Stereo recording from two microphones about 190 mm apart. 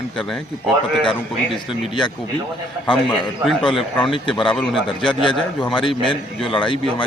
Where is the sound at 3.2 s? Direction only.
Centre (ahead or behind).